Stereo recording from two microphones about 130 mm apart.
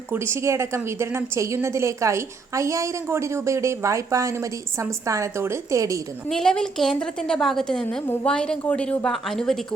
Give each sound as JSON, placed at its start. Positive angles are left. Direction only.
{"t": 0.1, "sound": "a woman's voice", "side_deg": -20}
{"t": 6.2, "sound": "a woman's voice", "side_deg": 5}